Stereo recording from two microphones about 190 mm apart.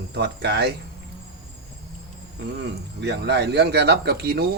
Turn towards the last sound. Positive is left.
turn(degrees=-55)  # may be behind; listen again after turning